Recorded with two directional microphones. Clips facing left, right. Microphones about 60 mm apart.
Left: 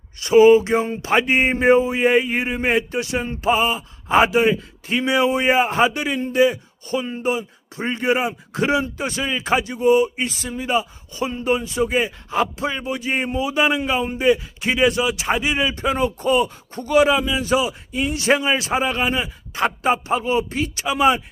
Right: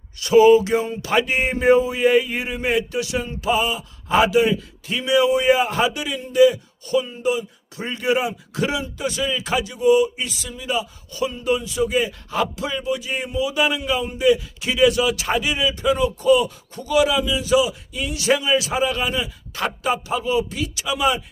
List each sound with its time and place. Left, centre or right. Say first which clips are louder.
0.2 s speech: left 1 dB; left